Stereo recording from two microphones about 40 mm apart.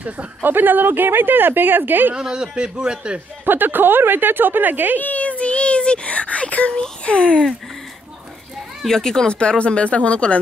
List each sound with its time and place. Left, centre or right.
0.4 s a woman's voice: right
2.1 s speech: centre
3.4 s a woman's voice: right
4.9 s a sound: left
6.7 s speech: centre
8.8 s speech: centre
9.3 s speech: left